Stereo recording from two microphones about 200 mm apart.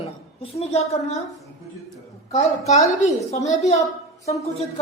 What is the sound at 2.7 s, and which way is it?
Speech, 35° left (ahead or behind).